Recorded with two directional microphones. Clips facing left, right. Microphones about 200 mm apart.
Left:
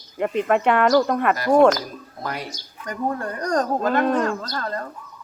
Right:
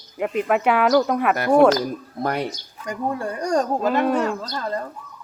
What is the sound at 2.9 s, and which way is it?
Speech, 15° right (ahead or behind).